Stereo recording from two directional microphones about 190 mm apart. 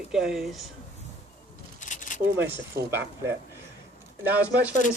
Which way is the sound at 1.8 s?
40° left (ahead or behind).